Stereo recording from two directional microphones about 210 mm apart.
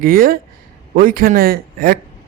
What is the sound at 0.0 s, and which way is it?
Speech, 45° right (ahead or behind).